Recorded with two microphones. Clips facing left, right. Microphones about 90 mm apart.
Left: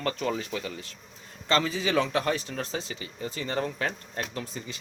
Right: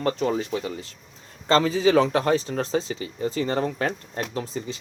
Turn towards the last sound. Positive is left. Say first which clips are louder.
# right 6 dB
turn(degrees=-35)  # may be behind; listen again after turning